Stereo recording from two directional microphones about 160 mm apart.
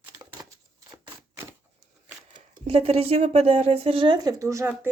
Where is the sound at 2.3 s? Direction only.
35° right (ahead or behind).